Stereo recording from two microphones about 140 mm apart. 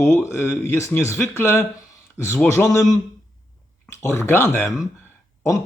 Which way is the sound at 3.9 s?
20° left (ahead or behind).